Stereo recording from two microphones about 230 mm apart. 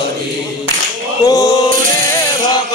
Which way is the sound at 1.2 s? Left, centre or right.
Centre.